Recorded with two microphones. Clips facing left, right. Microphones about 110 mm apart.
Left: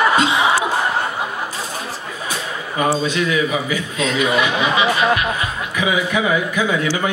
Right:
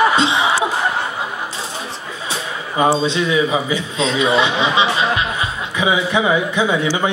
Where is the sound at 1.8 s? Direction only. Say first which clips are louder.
Even; 25° right (ahead or behind).